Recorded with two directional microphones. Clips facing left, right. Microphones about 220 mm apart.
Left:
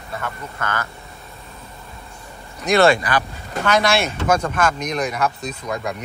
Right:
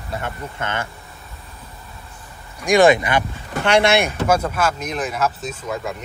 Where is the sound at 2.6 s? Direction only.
15° right (ahead or behind).